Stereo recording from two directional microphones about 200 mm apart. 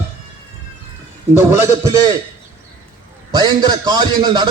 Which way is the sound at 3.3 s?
20° right (ahead or behind).